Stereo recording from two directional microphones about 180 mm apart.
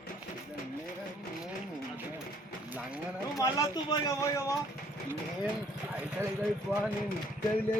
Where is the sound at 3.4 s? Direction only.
20° left (ahead or behind).